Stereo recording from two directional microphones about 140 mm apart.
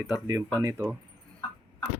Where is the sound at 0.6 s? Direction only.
20° right (ahead or behind).